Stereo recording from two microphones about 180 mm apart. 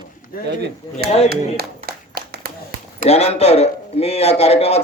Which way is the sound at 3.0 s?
35° left (ahead or behind).